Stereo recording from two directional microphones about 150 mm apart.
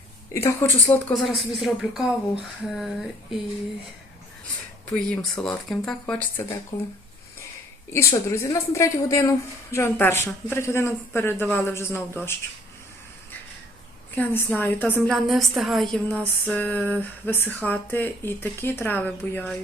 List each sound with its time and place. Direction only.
0.3 s a woman's voice: 15° left (ahead or behind)
1.2 s speech: centre (ahead or behind)
4.9 s a woman's voice: 5° left (ahead or behind)
7.9 s a woman's voice: 20° left (ahead or behind)
14.2 s a woman's voice: 15° left (ahead or behind)